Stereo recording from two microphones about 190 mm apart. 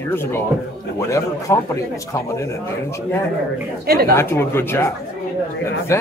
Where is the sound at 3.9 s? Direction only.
55° right (ahead or behind).